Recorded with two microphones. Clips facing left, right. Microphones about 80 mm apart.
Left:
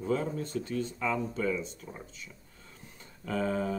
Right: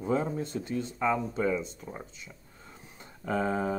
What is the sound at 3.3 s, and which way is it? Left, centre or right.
Speech, right.